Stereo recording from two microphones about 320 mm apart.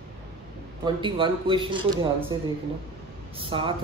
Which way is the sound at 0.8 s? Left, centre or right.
Centre.